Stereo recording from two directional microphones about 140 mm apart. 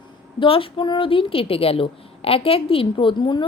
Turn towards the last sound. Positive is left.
turn(degrees=35)  # may be behind; listen again after turning